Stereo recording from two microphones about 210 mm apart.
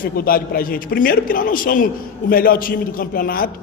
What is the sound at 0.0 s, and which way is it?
A man's voice, 45° left (ahead or behind).